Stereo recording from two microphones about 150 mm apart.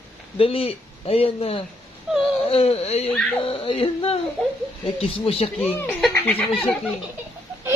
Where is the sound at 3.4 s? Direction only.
35° left (ahead or behind).